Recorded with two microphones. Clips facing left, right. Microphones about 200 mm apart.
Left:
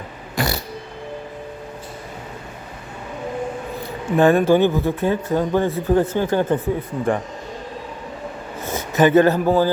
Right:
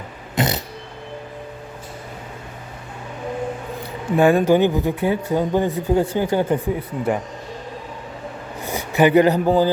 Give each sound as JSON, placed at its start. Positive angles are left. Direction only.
{"t": 0.3, "sound": "a sound", "side_deg": -20}
{"t": 4.2, "sound": "speech", "side_deg": -15}
{"t": 8.6, "sound": "speech", "side_deg": -15}